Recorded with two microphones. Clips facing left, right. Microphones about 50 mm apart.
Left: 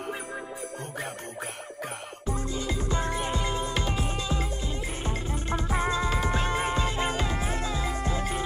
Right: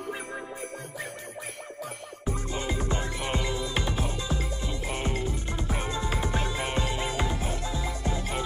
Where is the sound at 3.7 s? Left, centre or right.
Right.